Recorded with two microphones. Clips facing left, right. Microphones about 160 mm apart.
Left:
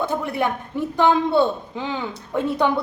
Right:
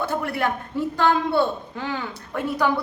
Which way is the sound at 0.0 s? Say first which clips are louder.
Left 2 dB; 20° left (ahead or behind).